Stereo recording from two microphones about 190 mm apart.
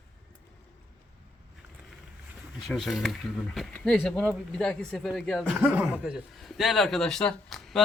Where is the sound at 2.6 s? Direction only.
Centre (ahead or behind).